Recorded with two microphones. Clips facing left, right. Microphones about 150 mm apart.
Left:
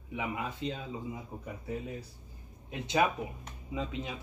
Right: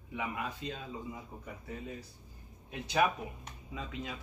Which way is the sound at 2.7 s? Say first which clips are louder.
Left 1 dB; 25° left (ahead or behind).